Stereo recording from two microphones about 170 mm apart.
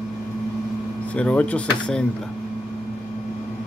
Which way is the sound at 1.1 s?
5° left (ahead or behind).